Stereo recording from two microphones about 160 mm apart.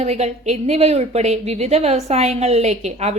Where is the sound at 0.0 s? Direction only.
45° right (ahead or behind).